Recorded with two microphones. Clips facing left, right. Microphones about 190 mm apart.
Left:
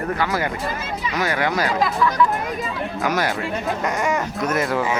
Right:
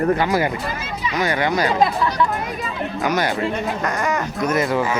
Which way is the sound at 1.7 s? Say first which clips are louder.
Right 2 dB; 25° right (ahead or behind).